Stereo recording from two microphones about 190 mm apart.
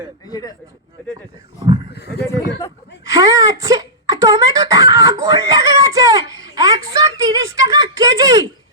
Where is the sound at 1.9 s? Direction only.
55° left (ahead or behind).